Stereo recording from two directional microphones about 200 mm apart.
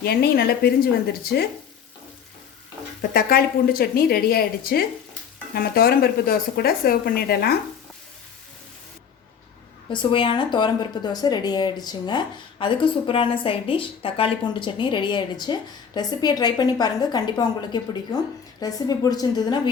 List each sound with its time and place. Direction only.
0.0 s speech: 50° left (ahead or behind)
3.0 s speech: 50° left (ahead or behind)
9.9 s a woman's voice: 25° left (ahead or behind)